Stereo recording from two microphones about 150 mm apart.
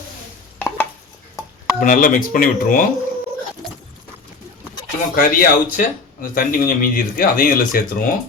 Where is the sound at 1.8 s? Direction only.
65° left (ahead or behind).